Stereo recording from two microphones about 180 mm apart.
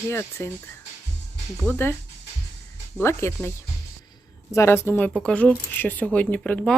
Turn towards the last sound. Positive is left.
turn(degrees=5)  # may be behind; listen again after turning